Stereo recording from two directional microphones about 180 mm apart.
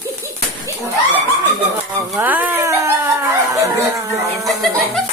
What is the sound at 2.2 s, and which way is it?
Speech, 10° right (ahead or behind).